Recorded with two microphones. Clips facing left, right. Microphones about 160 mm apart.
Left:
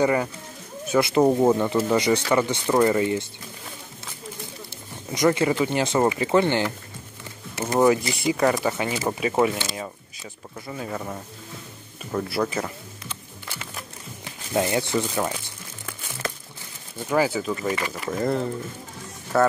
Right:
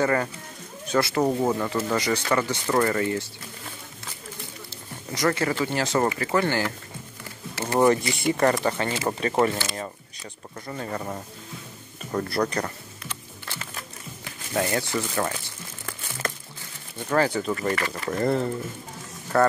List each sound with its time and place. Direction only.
0.0 s speech: 15° left (ahead or behind)
5.1 s speech: 20° left (ahead or behind)
7.9 s speech: centre (ahead or behind)
10.7 s speech: 5° left (ahead or behind)
12.1 s speech: 5° left (ahead or behind)
14.5 s speech: 20° left (ahead or behind)
17.0 s speech: 10° left (ahead or behind)